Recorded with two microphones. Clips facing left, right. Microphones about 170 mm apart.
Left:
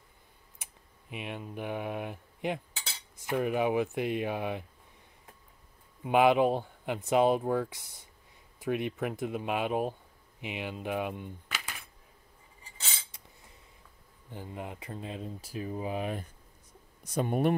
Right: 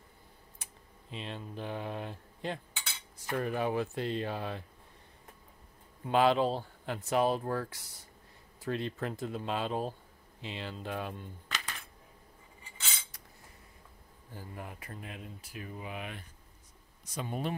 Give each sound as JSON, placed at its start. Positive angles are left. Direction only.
{"t": 1.1, "sound": "speech", "side_deg": 15}
{"t": 6.0, "sound": "speech", "side_deg": 15}
{"t": 14.3, "sound": "speech", "side_deg": 20}
{"t": 17.0, "sound": "speech", "side_deg": 60}